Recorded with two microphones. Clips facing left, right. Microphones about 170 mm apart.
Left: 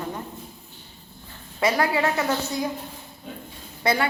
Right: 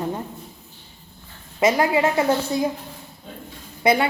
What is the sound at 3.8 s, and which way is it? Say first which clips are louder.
Speech: right 4 dB; 20° right (ahead or behind).